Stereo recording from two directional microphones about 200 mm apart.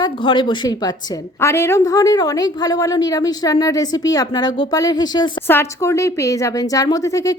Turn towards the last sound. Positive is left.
turn(degrees=15)  # may be behind; listen again after turning